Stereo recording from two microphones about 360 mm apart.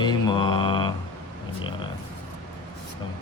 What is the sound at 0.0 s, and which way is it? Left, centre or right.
Mantra, centre.